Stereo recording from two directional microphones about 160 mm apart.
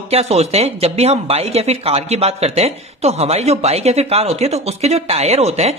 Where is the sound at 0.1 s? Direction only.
40° right (ahead or behind).